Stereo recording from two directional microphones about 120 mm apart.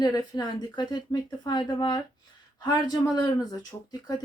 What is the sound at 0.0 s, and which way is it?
Speech, 35° left (ahead or behind).